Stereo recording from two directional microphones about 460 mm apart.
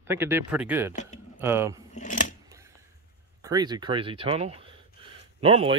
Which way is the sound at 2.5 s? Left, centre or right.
Centre.